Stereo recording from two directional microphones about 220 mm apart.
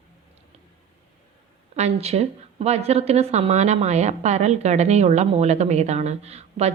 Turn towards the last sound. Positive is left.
turn(degrees=-30)  # may be behind; listen again after turning